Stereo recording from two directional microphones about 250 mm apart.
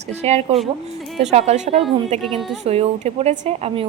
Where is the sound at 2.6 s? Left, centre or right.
Right.